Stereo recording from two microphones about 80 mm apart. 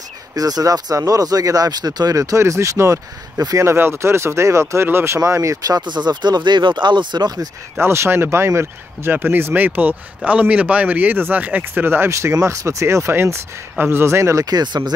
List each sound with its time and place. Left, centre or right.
0.4 s speech: right
5.8 s speech: right
7.8 s speech: right
14.4 s speech: right